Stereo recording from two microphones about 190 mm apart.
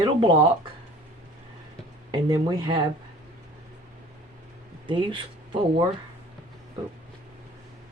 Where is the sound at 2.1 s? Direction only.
25° right (ahead or behind).